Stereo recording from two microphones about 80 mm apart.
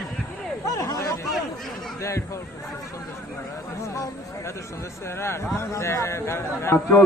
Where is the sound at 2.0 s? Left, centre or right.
Left.